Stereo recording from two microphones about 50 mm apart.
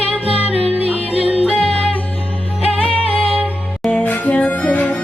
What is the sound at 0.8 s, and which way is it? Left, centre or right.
Music, right.